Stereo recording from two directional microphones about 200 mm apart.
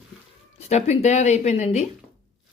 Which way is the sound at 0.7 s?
35° left (ahead or behind).